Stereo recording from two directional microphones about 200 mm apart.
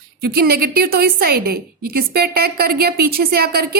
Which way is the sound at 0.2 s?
50° right (ahead or behind).